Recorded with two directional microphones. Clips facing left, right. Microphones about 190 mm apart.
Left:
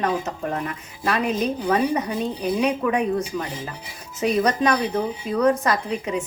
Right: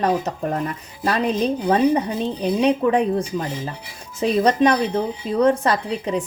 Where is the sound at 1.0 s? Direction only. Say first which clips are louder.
Right 2 dB; 30° right (ahead or behind).